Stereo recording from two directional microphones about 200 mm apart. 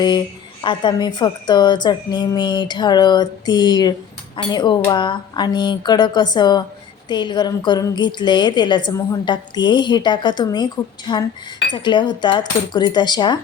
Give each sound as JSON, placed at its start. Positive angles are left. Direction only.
{"t": 0.6, "sound": "a woman's voice", "side_deg": 25}